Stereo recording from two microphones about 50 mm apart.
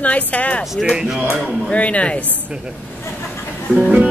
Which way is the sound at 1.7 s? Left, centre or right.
Left.